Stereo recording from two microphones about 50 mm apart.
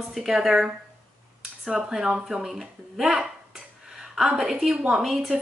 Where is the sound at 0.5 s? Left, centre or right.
Right.